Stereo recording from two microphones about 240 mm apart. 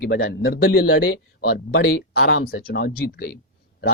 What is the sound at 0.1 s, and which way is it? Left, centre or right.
Speech, left.